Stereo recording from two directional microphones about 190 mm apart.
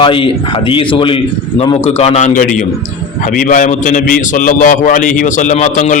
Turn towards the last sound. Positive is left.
turn(degrees=40)  # may be behind; listen again after turning